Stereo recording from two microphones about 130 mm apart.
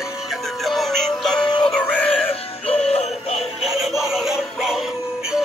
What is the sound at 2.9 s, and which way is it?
Synthetic singing, 55° left (ahead or behind).